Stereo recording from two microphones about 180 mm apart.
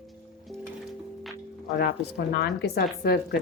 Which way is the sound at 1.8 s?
65° left (ahead or behind).